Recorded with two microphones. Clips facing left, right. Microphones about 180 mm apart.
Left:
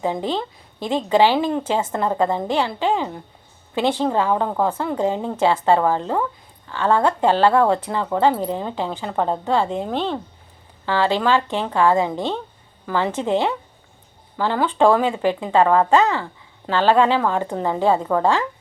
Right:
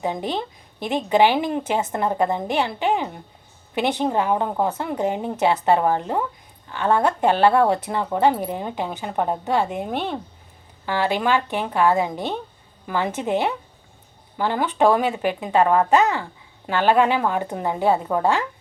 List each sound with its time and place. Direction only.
0.0 s a woman's voice: 15° right (ahead or behind)